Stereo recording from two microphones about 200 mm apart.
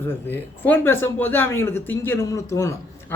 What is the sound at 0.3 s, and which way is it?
Speech, 10° left (ahead or behind).